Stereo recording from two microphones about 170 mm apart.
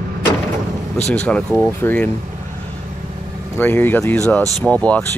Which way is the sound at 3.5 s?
10° left (ahead or behind).